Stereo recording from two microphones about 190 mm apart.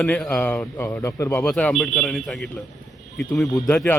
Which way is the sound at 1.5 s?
5° left (ahead or behind).